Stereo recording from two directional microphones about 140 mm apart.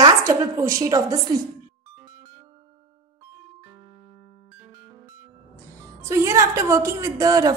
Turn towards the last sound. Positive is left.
turn(degrees=-25)  # may be behind; listen again after turning